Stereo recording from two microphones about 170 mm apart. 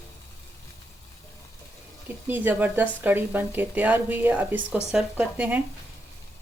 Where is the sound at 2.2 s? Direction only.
10° right (ahead or behind).